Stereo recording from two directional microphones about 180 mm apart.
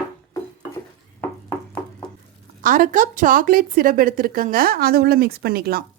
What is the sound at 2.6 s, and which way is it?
A woman's voice, 50° right (ahead or behind).